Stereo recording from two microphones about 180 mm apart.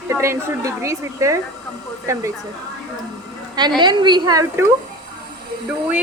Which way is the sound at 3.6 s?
25° right (ahead or behind).